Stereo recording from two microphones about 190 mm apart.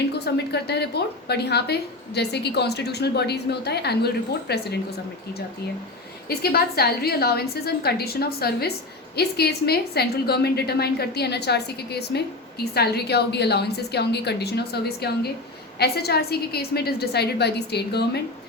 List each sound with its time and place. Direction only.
0.1 s a woman's voice: 60° left (ahead or behind)
6.2 s a woman's voice: 55° left (ahead or behind)